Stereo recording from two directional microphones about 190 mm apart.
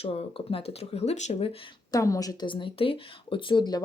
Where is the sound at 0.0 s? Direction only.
30° left (ahead or behind).